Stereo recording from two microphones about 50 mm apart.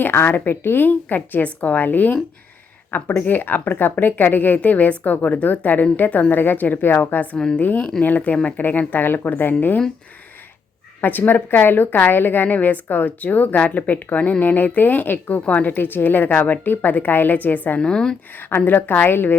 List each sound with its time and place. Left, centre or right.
0.0 s a woman's voice: left
3.2 s a woman's voice: left
7.3 s speech: centre
7.6 s a woman's voice: left
11.0 s a woman's voice: left
15.4 s a woman's voice: left
15.7 s a woman's voice: left
17.7 s speech: centre
18.3 s a woman's voice: left